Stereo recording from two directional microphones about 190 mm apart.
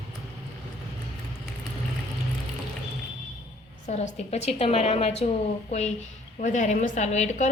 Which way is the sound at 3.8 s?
35° left (ahead or behind).